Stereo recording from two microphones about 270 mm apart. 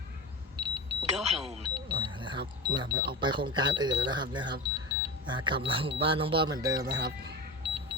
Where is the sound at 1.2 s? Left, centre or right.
Right.